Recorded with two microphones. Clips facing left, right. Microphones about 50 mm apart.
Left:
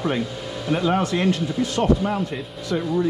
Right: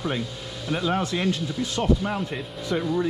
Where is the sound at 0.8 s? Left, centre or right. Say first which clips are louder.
Left 3 dB; left.